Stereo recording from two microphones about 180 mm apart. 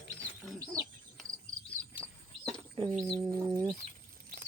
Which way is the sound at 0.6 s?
20° right (ahead or behind).